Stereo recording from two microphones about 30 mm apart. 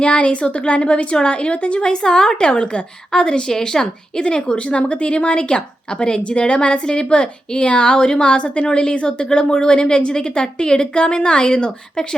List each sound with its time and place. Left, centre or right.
0.0 s a woman's voice: left
4.5 s a woman's voice: left
6.8 s a woman's voice: left
8.7 s a woman's voice: left